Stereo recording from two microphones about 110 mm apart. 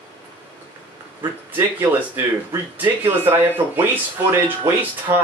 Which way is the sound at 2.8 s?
20° right (ahead or behind).